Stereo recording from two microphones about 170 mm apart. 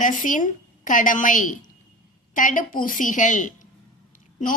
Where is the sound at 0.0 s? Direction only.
50° left (ahead or behind).